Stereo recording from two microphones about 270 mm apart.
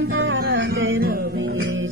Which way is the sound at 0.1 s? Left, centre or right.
Right.